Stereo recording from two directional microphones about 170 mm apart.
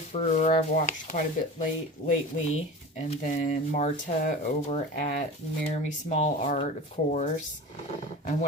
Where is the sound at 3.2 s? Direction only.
50° left (ahead or behind).